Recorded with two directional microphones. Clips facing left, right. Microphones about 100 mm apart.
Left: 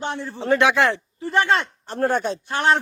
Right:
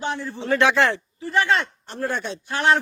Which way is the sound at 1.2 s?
35° left (ahead or behind).